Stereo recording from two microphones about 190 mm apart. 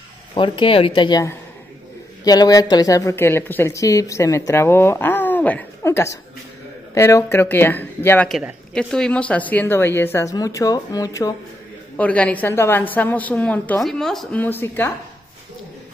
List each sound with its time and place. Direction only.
0.3 s a woman's voice: 25° left (ahead or behind)
12.0 s a woman's voice: 5° left (ahead or behind)